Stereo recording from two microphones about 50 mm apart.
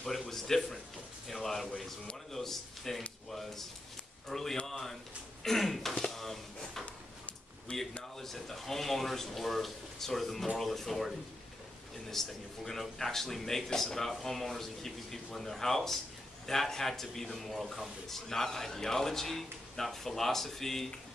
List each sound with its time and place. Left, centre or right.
0.0 s speech: centre
6.1 s a sound: centre
7.7 s speech: left
8.2 s speech: centre
12.1 s speech: centre